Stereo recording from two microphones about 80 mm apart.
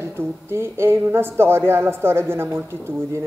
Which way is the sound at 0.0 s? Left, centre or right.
Right.